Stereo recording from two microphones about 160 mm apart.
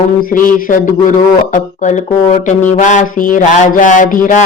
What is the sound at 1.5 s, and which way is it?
Speech, 50° left (ahead or behind).